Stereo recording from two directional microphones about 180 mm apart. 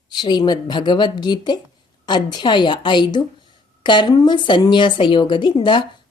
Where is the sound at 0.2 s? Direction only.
25° left (ahead or behind).